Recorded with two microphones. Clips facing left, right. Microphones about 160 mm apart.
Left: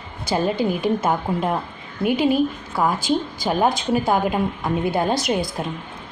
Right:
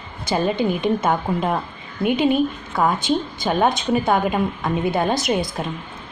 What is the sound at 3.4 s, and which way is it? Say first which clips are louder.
A woman's voice: right 1 dB; 5° left (ahead or behind).